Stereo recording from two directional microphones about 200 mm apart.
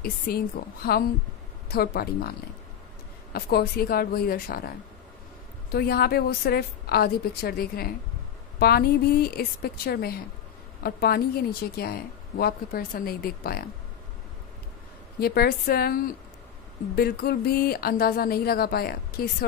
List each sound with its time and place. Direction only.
0.6 s a woman's voice: 45° left (ahead or behind)
3.3 s a woman's voice: 50° left (ahead or behind)
15.1 s a woman's voice: 50° left (ahead or behind)